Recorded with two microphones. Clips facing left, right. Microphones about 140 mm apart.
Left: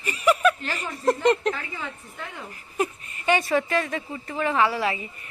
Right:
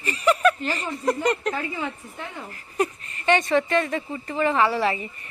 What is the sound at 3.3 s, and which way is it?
A woman's voice, 10° left (ahead or behind).